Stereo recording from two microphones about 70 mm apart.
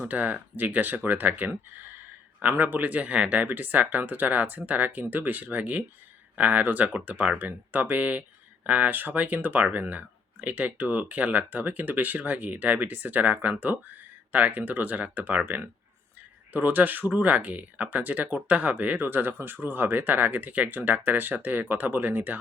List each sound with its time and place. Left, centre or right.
0.0 s speech: right